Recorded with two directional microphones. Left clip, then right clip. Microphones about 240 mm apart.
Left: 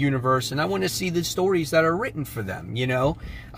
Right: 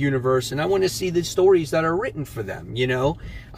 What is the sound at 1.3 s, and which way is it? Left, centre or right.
Speech, left.